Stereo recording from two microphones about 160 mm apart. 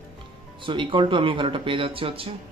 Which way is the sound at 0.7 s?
30° right (ahead or behind).